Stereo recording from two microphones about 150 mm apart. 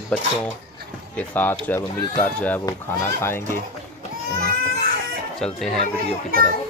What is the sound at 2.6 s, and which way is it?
Speech, 20° left (ahead or behind).